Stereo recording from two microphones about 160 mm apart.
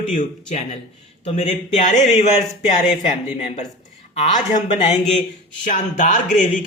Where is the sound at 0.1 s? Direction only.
50° left (ahead or behind).